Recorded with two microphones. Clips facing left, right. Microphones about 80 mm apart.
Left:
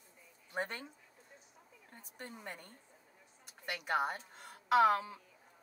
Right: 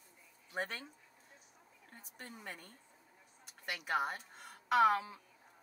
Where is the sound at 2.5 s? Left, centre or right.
Left.